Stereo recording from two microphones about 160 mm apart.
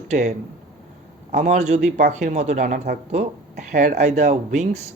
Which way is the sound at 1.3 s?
50° right (ahead or behind).